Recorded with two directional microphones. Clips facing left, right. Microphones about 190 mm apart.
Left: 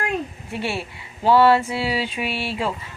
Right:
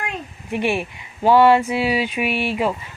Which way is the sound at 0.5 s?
15° right (ahead or behind).